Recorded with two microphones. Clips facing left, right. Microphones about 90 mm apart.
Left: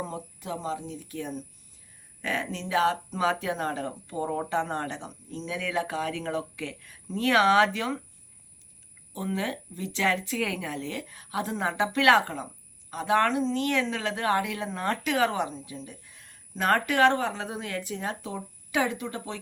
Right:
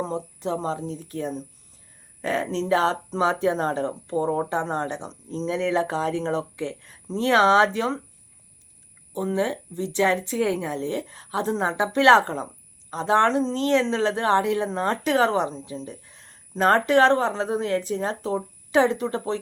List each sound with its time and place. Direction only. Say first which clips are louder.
0.0 s speech: right 8 dB; 30° right (ahead or behind)
9.1 s speech: right 6 dB; 20° right (ahead or behind)